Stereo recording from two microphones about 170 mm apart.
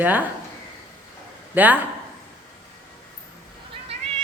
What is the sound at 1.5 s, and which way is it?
Speech, 10° right (ahead or behind).